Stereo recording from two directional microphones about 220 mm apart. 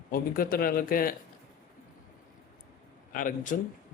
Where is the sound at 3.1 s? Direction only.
40° left (ahead or behind).